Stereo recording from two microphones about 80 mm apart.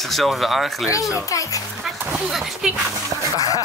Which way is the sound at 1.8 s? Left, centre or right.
Centre.